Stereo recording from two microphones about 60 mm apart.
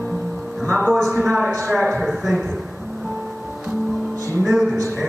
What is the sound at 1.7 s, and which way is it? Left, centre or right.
Music, centre.